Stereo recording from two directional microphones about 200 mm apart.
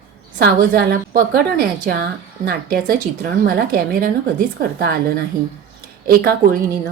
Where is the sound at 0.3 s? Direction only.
50° right (ahead or behind).